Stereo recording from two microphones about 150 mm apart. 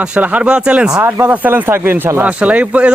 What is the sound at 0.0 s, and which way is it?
Speech, 10° right (ahead or behind).